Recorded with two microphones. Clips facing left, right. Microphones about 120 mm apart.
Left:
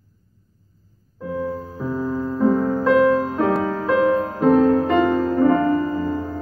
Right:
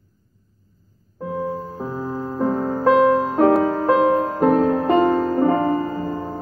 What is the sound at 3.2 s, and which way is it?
Music, 45° right (ahead or behind).